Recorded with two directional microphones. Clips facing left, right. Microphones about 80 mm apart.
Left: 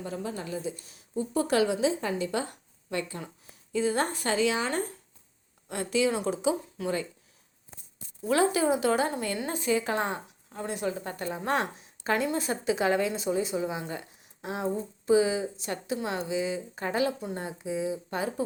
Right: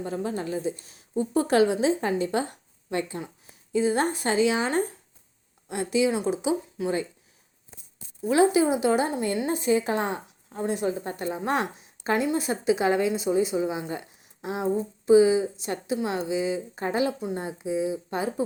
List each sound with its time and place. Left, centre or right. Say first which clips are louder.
0.0 s a woman's voice: right 5 dB; right; by 7.0 s centre
8.2 s a woman's voice: right 4 dB; centre